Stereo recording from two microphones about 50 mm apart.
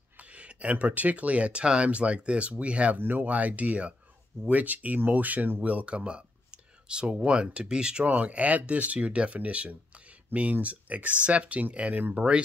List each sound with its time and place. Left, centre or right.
0.2 s speech: right
3.0 s speech: right